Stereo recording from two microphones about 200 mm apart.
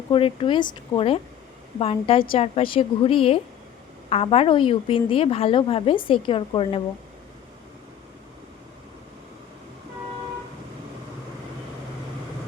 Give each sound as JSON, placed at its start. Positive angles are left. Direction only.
{"t": 0.1, "sound": "a woman's voice", "side_deg": 25}